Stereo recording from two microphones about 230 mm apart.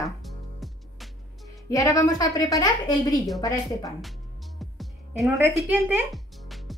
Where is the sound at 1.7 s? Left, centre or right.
Centre.